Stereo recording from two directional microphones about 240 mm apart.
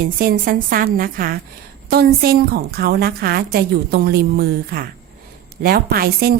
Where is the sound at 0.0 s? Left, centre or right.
Right.